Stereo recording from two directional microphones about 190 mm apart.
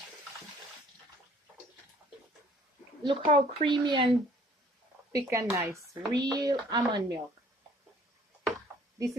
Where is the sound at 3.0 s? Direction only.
25° right (ahead or behind).